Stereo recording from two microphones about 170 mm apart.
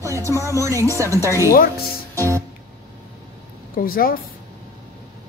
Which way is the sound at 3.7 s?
55° left (ahead or behind).